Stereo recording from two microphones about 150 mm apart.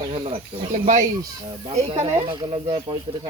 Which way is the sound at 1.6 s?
40° right (ahead or behind).